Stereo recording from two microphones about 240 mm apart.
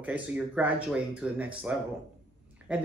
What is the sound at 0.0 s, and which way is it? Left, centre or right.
Speech, centre.